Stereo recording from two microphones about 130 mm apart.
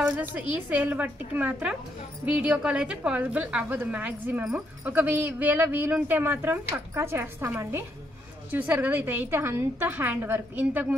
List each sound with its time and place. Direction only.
0.0 s a woman's voice: 15° right (ahead or behind)